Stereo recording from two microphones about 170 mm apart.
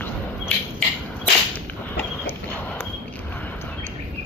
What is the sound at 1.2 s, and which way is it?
Whip, 10° left (ahead or behind).